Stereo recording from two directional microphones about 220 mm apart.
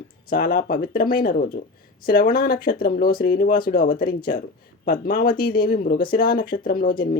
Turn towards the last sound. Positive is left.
turn(degrees=40)  # may be behind; listen again after turning